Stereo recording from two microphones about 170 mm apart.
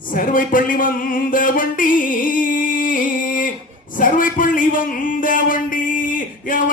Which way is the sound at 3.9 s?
50° left (ahead or behind).